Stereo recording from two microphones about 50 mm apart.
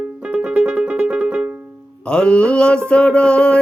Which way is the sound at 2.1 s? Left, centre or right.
Left.